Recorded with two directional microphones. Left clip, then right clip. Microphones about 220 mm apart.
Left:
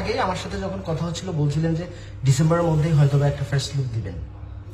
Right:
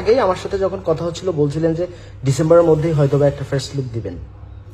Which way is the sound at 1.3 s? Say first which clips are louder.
Right 13 dB; 60° right (ahead or behind).